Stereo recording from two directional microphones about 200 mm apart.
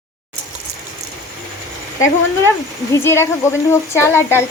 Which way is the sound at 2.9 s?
15° left (ahead or behind).